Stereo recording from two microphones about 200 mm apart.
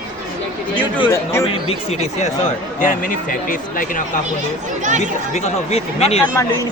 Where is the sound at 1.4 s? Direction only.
30° left (ahead or behind).